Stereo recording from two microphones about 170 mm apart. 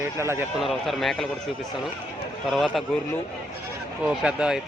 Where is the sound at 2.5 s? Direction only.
Centre (ahead or behind).